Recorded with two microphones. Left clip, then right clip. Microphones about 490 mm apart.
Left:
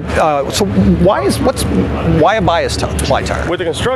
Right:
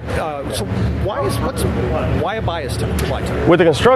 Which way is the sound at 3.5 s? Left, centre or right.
Right.